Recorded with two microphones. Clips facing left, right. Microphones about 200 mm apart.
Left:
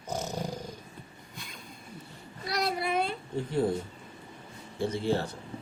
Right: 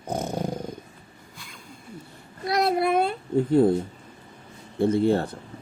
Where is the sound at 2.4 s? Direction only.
55° right (ahead or behind).